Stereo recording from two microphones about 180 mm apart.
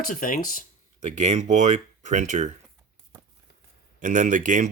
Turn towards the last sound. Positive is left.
turn(degrees=-45)  # may be behind; listen again after turning